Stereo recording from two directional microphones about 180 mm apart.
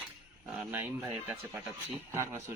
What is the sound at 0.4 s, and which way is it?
Speech, 5° right (ahead or behind).